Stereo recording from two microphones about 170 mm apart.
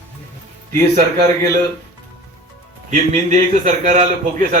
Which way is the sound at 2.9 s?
45° right (ahead or behind).